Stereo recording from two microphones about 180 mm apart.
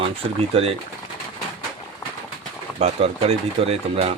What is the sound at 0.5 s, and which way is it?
Speech, 35° right (ahead or behind).